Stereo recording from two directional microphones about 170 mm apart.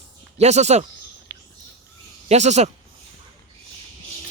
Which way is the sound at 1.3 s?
80° right.